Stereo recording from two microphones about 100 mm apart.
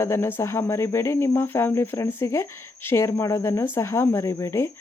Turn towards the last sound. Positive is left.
turn(degrees=30)  # may be behind; listen again after turning